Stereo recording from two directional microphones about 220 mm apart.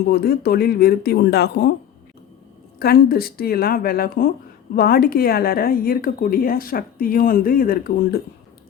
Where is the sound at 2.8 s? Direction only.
45° left (ahead or behind).